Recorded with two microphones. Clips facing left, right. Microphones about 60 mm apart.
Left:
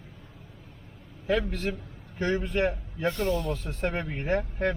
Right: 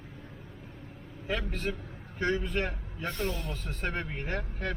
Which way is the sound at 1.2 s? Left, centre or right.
Left.